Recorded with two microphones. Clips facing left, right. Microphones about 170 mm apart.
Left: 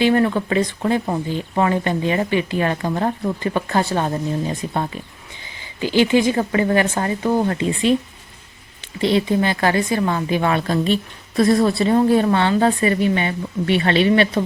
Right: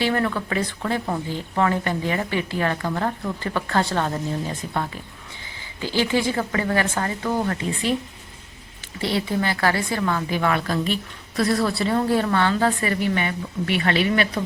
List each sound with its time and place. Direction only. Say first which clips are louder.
0.0 s speech: left 6 dB; 20° left (ahead or behind)
9.0 s speech: left 6 dB; 20° left (ahead or behind)